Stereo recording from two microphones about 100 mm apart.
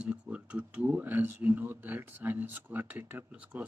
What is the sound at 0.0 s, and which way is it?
Speech, 10° right (ahead or behind).